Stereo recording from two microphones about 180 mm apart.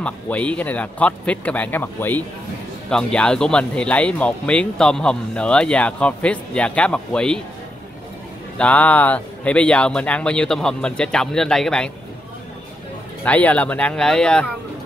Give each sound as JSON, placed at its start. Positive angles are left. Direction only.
{"t": 0.0, "sound": "speech", "side_deg": 5}
{"t": 8.5, "sound": "speech", "side_deg": 5}
{"t": 13.2, "sound": "speech", "side_deg": 10}